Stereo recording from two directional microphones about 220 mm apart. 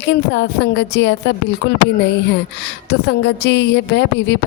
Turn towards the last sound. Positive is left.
turn(degrees=50)  # may be behind; listen again after turning